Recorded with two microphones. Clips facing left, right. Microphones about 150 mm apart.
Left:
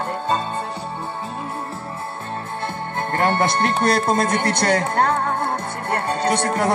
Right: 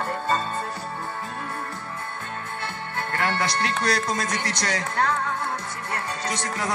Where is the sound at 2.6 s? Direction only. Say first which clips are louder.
Left 6 dB; 45° left (ahead or behind).